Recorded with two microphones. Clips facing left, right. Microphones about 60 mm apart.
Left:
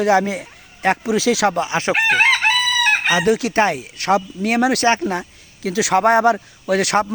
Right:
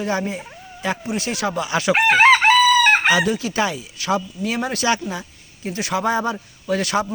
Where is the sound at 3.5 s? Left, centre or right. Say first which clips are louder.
Left 5 dB; left.